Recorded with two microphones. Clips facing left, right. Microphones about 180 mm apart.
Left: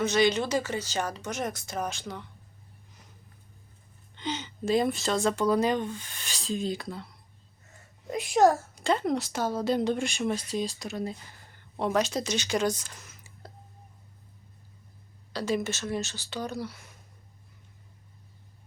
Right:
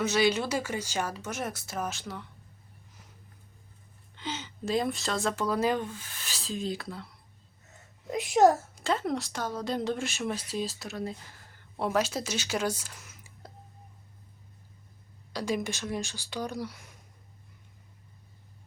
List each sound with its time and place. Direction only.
0.0 s speech: 5° right (ahead or behind)
4.1 s speech: 5° right (ahead or behind)
8.1 s a child's voice: 20° right (ahead or behind)
8.7 s speech: centre (ahead or behind)
15.3 s speech: 10° right (ahead or behind)